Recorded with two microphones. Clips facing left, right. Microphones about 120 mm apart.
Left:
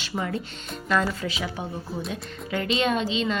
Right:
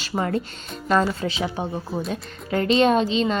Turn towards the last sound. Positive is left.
turn(degrees=-40)  # may be behind; listen again after turning